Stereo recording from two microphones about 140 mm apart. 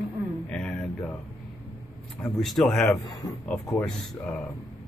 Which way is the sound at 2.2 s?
5° left (ahead or behind).